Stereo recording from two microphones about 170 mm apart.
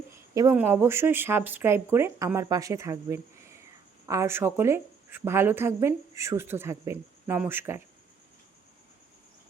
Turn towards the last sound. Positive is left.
turn(degrees=-15)  # may be behind; listen again after turning